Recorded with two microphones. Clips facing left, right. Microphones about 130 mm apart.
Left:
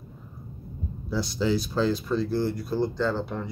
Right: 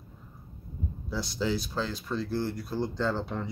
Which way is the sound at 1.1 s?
5° left (ahead or behind).